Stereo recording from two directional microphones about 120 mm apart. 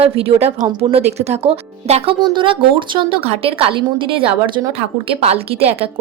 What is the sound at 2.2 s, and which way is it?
A woman's voice, 45° right (ahead or behind).